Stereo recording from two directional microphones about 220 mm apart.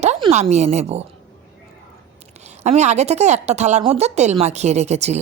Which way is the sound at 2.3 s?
30° right (ahead or behind).